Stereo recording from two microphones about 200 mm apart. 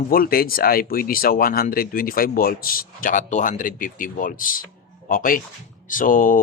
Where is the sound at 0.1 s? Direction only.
45° left (ahead or behind).